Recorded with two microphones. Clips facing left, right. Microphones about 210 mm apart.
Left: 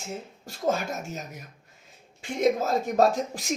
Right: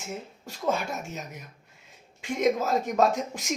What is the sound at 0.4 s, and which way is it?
Speech, 40° left (ahead or behind).